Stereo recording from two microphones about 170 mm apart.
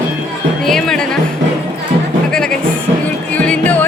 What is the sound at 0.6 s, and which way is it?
Music, 5° left (ahead or behind).